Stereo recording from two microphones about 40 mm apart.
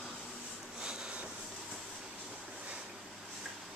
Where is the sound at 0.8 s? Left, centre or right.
Right.